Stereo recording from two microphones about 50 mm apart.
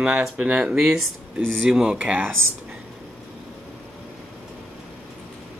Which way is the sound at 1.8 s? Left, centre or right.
Right.